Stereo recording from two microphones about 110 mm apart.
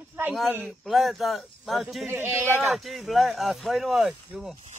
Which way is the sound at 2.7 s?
Centre (ahead or behind).